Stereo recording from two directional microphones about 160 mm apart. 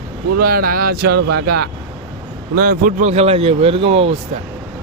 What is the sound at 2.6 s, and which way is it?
Speech, 60° right (ahead or behind).